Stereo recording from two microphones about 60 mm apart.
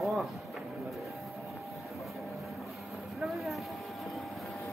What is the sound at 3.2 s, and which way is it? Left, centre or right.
Vehicle, centre.